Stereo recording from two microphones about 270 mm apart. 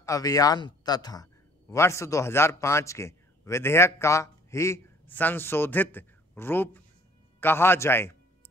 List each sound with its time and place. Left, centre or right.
0.0 s a man's voice: centre